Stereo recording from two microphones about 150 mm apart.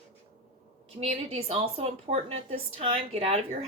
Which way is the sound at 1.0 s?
40° right (ahead or behind).